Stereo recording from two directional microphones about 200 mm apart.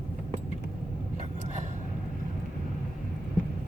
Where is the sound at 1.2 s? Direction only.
35° right (ahead or behind).